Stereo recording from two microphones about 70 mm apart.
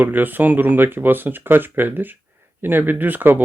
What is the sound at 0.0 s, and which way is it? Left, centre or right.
Speech, right.